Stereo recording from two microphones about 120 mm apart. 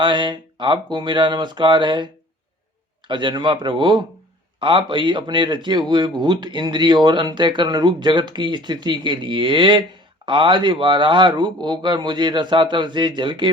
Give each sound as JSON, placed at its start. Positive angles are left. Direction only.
{"t": 0.0, "sound": "speech", "side_deg": -40}
{"t": 3.1, "sound": "speech", "side_deg": -40}